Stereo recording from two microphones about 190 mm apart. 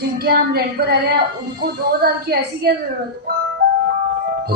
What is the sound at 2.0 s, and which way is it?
Speech, 55° right (ahead or behind).